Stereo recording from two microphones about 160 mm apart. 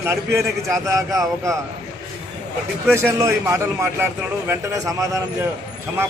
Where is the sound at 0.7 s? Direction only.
20° right (ahead or behind).